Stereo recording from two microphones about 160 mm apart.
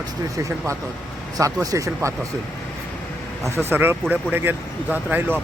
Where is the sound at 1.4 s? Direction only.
20° right (ahead or behind).